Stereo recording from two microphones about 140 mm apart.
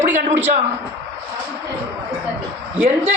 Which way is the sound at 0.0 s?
60° right (ahead or behind).